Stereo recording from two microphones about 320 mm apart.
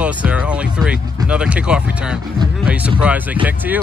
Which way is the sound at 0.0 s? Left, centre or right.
Centre.